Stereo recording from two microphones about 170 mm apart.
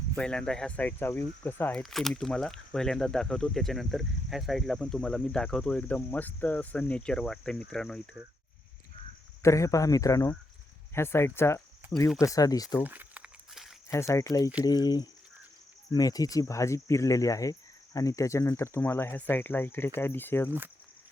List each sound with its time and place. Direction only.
0.2 s cricket: 5° left (ahead or behind)
1.8 s speech: centre (ahead or behind)
9.4 s speech: 15° left (ahead or behind)
12.8 s crumpling: 10° right (ahead or behind)
13.9 s cricket: 15° left (ahead or behind)
14.6 s speech: 25° left (ahead or behind)
15.9 s cricket: 20° left (ahead or behind)